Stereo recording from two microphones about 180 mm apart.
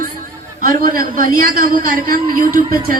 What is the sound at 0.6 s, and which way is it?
A woman's voice, 50° right (ahead or behind).